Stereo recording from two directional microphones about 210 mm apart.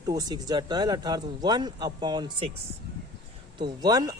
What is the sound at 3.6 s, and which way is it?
Speech, 20° right (ahead or behind).